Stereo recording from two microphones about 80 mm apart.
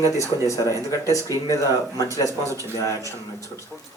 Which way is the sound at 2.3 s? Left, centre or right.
Right.